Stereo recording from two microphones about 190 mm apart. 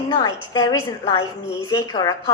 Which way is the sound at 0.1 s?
20° left (ahead or behind).